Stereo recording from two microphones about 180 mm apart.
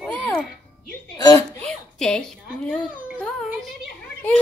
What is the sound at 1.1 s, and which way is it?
Chuckle, 20° left (ahead or behind).